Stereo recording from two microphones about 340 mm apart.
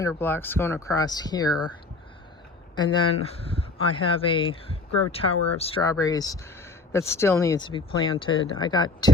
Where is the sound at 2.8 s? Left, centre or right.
Centre.